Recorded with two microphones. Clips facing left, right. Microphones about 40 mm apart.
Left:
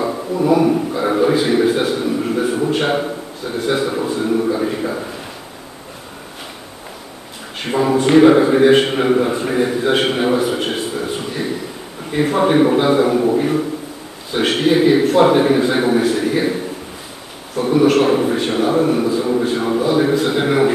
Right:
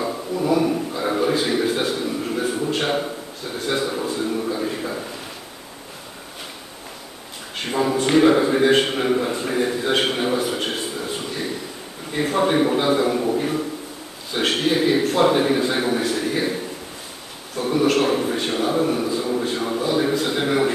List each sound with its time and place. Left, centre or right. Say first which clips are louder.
0.0 s a sound: left 5 dB; centre
3.5 s a man's voice: left 5 dB; centre
7.6 s a man's voice: left 5 dB; centre